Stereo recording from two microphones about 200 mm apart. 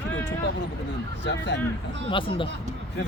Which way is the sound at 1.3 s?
60° left (ahead or behind).